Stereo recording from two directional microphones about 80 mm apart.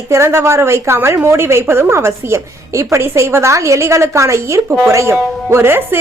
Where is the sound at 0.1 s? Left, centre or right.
Right.